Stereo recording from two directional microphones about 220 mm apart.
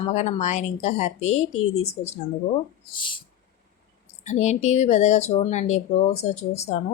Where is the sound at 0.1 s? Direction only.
30° left (ahead or behind).